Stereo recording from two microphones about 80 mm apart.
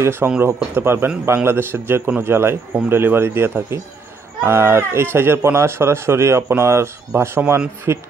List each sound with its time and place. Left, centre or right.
0.0 s a man's voice: right